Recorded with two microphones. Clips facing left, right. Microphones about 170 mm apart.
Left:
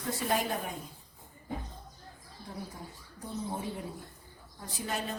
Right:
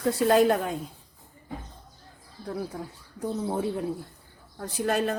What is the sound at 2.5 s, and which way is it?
A woman's voice, 80° right.